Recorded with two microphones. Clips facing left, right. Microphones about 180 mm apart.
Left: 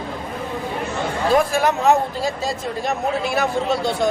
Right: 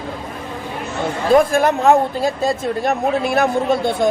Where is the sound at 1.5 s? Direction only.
50° right (ahead or behind).